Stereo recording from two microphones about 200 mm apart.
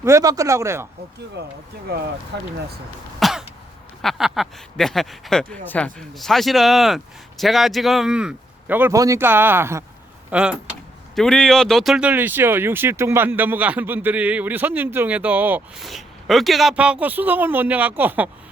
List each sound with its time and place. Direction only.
0.0 s speech: 15° right (ahead or behind)
1.4 s speech: 55° right (ahead or behind)
3.2 s throat clearing: centre (ahead or behind)
4.0 s speech: centre (ahead or behind)